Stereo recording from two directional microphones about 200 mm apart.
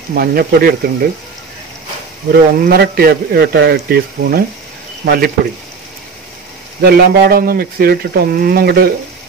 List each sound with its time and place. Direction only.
0.1 s a man's voice: 50° right (ahead or behind)
2.3 s a man's voice: 50° right (ahead or behind)
6.8 s a man's voice: 50° right (ahead or behind)